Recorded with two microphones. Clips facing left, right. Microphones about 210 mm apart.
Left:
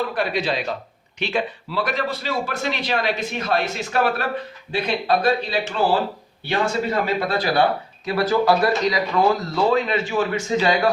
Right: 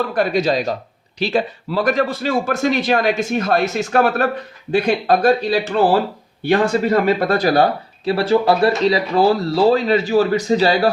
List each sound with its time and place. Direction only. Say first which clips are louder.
0.1 s speech: right 6 dB; 45° right (ahead or behind)